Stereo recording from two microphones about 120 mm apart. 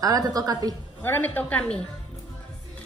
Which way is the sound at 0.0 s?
30° right (ahead or behind).